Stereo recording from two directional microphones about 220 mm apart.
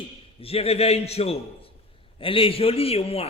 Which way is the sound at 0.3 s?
25° left (ahead or behind).